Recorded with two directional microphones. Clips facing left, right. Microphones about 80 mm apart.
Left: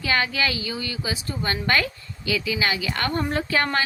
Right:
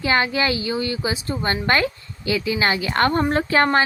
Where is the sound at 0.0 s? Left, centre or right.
Right.